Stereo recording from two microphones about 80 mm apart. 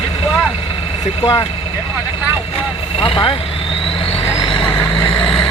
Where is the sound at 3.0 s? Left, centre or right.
Left.